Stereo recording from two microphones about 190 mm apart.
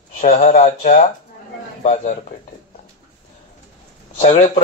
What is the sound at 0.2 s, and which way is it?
Speech, 35° left (ahead or behind).